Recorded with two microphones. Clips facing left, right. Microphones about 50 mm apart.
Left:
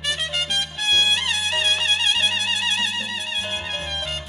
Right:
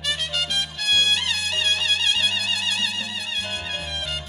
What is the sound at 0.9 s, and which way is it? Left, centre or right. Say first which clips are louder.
Music: left 1 dB; centre.